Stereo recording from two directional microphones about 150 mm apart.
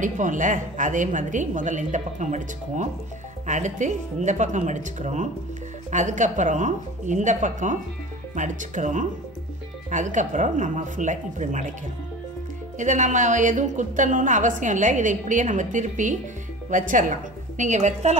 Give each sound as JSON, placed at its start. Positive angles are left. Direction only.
{"t": 0.0, "sound": "a woman's voice", "side_deg": -60}
{"t": 12.7, "sound": "a woman's voice", "side_deg": -55}